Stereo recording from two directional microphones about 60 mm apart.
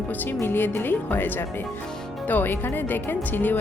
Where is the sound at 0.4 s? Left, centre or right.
Left.